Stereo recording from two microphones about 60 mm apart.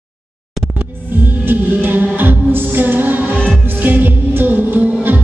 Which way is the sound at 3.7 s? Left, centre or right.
Right.